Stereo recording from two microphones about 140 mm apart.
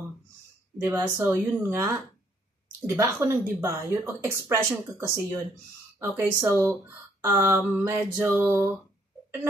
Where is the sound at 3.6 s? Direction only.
20° right (ahead or behind).